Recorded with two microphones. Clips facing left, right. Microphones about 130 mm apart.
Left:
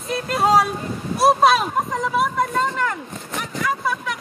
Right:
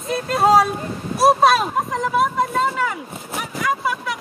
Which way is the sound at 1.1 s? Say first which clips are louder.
Right 1 dB; centre (ahead or behind).